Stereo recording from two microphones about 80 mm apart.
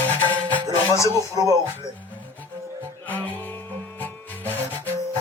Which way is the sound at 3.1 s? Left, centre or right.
Left.